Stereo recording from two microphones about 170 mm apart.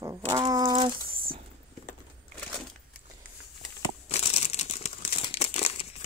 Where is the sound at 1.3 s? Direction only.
30° right (ahead or behind).